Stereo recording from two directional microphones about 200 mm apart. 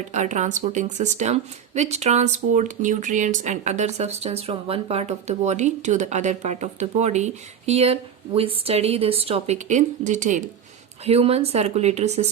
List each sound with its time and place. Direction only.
0.1 s speech: 35° right (ahead or behind)